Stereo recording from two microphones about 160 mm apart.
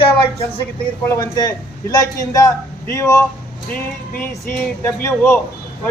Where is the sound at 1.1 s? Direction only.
25° left (ahead or behind).